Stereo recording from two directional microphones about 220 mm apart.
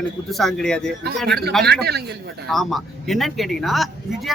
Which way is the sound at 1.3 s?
45° right (ahead or behind).